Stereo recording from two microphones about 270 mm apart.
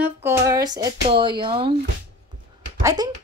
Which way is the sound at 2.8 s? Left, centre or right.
Centre.